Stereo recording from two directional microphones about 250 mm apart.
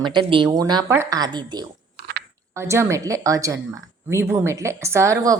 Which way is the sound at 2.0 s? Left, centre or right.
Right.